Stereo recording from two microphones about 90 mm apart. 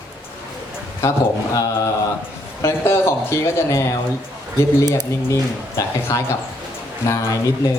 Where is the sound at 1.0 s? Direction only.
30° left (ahead or behind).